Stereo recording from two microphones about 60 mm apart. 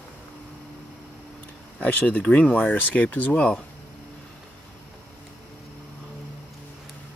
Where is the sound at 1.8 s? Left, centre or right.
Left.